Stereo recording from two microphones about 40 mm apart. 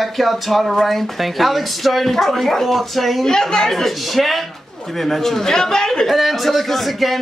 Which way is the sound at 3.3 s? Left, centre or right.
Centre.